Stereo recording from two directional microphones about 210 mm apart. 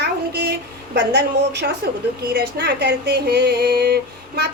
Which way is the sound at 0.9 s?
55° right (ahead or behind).